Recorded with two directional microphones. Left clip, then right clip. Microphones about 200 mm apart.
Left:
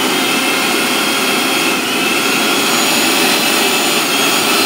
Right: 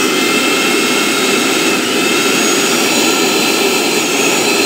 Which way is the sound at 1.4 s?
5° right (ahead or behind).